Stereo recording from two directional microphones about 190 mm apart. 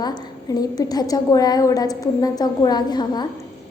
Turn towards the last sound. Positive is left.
turn(degrees=20)  # may be behind; listen again after turning